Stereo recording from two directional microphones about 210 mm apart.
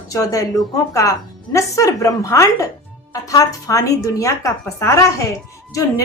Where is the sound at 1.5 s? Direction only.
15° left (ahead or behind).